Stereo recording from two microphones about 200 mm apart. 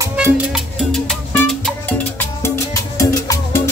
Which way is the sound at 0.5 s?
Centre (ahead or behind).